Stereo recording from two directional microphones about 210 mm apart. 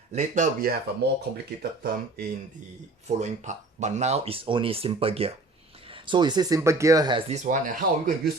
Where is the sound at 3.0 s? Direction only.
35° right (ahead or behind).